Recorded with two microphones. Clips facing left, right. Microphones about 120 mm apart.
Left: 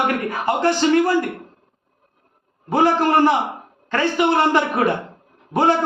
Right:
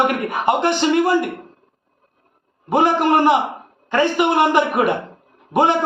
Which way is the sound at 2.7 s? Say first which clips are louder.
Right 1 dB; 15° right (ahead or behind).